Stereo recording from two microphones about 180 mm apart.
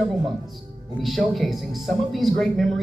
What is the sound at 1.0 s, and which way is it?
A man's voice, centre (ahead or behind).